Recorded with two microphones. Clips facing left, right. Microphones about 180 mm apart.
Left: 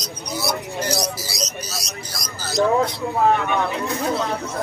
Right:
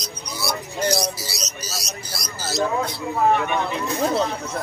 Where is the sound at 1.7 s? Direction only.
5° right (ahead or behind).